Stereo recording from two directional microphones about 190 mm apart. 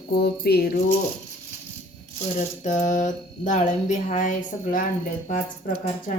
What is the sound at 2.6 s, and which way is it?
Speech, 40° left (ahead or behind).